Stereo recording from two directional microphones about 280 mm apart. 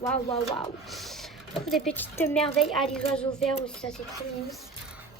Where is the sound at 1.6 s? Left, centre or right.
Centre.